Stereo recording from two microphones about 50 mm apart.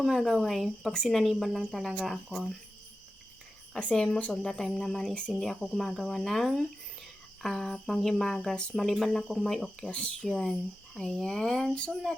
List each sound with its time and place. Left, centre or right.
0.0 s speech: centre
3.9 s speech: centre
9.9 s speech: centre
10.3 s speech: centre